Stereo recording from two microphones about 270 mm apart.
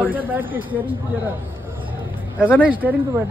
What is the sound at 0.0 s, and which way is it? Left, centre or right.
Speech, centre.